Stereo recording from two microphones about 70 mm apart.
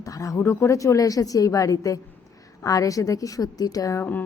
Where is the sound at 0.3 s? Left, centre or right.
Left.